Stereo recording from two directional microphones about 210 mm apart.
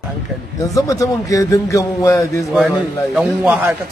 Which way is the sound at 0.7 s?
15° left (ahead or behind).